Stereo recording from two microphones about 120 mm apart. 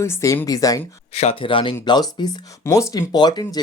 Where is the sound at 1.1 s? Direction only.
55° left (ahead or behind); by 3.6 s 35° left (ahead or behind).